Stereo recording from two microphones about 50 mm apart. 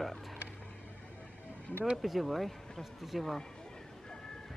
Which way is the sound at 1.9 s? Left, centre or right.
Centre.